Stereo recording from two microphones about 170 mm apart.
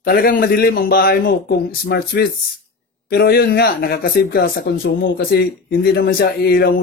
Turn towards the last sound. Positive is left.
turn(degrees=65)  # may be behind; listen again after turning